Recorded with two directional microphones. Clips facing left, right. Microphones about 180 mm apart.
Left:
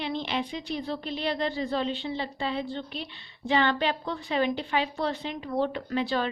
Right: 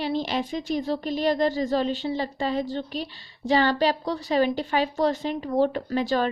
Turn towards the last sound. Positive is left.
turn(degrees=-45)  # may be behind; listen again after turning